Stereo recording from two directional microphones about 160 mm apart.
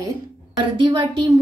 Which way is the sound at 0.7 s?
30° right (ahead or behind).